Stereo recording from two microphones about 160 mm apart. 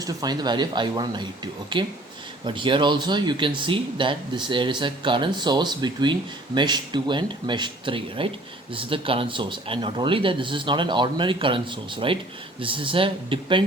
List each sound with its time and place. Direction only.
0.0 s speech: 25° right (ahead or behind)